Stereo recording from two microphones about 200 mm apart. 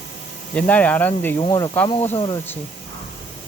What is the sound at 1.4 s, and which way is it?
Speech, 20° left (ahead or behind).